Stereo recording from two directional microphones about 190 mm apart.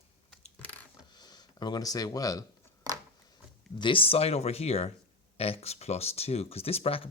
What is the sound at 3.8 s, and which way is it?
Speech, 30° left (ahead or behind).